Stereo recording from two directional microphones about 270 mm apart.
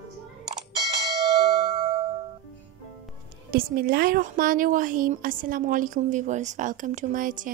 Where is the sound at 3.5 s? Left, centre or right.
Right.